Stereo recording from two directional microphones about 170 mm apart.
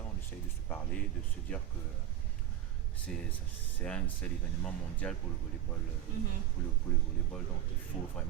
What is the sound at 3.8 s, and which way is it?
Speech, 5° left (ahead or behind).